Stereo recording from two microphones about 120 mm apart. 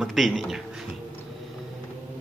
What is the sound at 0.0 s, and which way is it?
Speech, centre (ahead or behind).